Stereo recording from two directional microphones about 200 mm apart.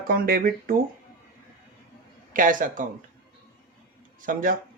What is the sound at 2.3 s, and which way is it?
Speech, 40° right (ahead or behind).